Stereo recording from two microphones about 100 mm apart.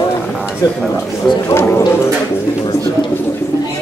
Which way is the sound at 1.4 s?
25° left (ahead or behind).